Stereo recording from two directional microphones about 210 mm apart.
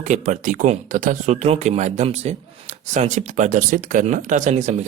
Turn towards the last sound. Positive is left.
turn(degrees=-35)  # may be behind; listen again after turning